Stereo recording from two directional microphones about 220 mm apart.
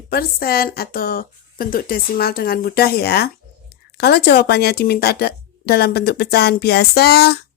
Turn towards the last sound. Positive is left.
turn(degrees=45)  # may be behind; listen again after turning